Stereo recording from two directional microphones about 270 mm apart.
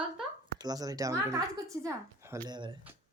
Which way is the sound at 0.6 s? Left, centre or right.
Centre.